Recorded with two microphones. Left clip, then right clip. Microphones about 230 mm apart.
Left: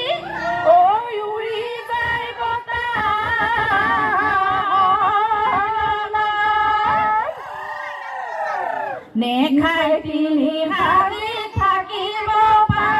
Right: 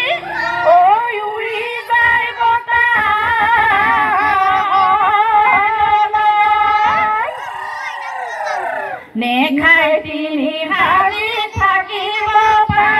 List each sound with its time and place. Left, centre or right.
0.7 s cat: right
1.9 s singing: right
4.5 s a sound: right
9.2 s female singing: right
12.3 s singing: right